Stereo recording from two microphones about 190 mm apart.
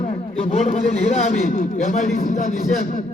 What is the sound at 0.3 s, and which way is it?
A man's voice, 35° left (ahead or behind).